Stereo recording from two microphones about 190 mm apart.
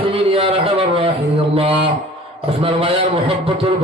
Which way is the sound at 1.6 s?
30° right (ahead or behind).